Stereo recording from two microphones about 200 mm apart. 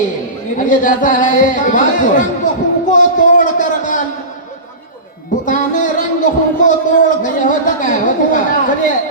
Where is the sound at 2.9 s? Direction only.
40° left (ahead or behind).